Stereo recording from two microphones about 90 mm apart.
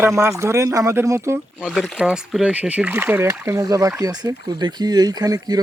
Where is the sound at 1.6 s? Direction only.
10° right (ahead or behind); by 3.6 s 30° right (ahead or behind).